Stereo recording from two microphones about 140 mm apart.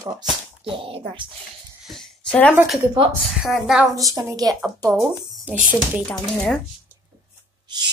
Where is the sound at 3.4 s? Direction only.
5° right (ahead or behind).